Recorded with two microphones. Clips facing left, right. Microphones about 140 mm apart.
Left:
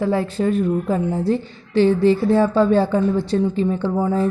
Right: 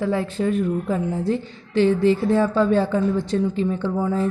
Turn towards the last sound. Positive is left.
turn(degrees=40)  # may be behind; listen again after turning